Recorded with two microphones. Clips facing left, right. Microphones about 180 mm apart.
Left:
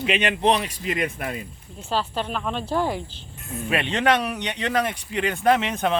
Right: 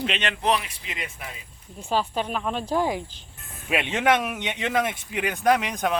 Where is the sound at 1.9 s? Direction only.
10° right (ahead or behind).